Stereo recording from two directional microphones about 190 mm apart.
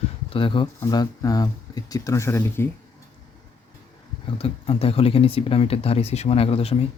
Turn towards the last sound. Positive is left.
turn(degrees=30)  # may be behind; listen again after turning